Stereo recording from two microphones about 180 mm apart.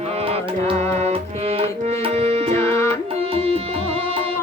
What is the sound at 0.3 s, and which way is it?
Music, 30° right (ahead or behind).